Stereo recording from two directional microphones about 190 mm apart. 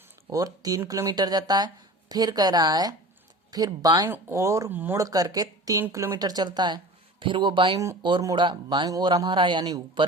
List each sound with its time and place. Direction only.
0.3 s speech: 20° right (ahead or behind)